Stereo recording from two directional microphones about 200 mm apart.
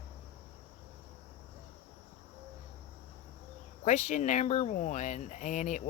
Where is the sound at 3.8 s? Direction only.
35° left (ahead or behind).